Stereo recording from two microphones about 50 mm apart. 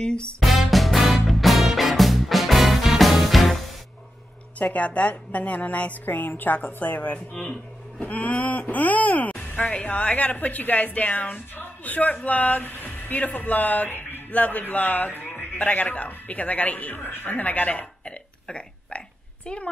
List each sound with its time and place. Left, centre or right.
0.0 s speech: centre
0.4 s music: centre
4.6 s a woman's voice: left
17.0 s a woman's voice: left
18.5 s burping: left